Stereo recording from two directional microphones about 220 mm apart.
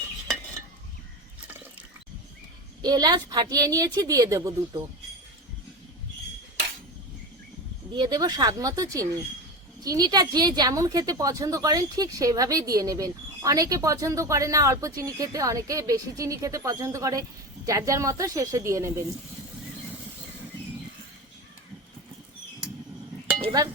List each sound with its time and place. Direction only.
2.8 s speech: 20° right (ahead or behind)
7.9 s speech: 20° right (ahead or behind)
23.4 s a sound: 15° right (ahead or behind)